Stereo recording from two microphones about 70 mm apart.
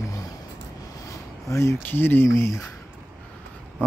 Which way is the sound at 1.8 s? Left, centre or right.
Left.